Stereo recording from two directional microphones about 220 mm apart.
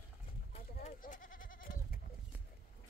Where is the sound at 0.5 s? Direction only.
35° left (ahead or behind).